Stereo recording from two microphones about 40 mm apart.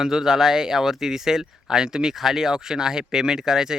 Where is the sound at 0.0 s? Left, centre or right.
Centre.